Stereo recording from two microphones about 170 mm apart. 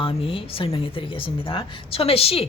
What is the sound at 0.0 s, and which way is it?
Speech, 35° left (ahead or behind).